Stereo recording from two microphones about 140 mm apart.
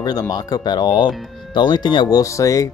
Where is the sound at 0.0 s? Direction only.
30° left (ahead or behind).